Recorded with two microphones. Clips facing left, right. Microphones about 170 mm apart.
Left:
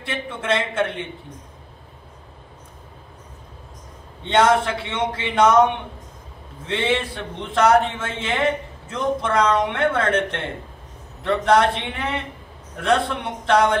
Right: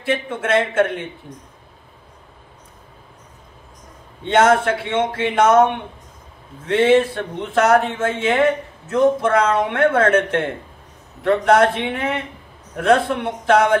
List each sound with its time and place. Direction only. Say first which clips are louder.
0.0 s a man's voice: right 6 dB; 50° right (ahead or behind)
4.3 s a man's voice: right 3 dB; 50° right (ahead or behind)
6.7 s a man's voice: right 8 dB; 50° right (ahead or behind)